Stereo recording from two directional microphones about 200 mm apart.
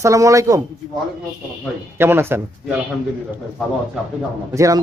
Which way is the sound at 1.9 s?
10° right (ahead or behind).